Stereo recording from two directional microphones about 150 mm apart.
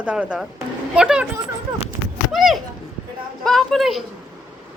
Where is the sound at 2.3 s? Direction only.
Centre (ahead or behind).